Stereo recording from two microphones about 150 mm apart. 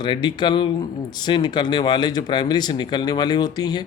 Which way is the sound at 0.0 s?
30° left (ahead or behind).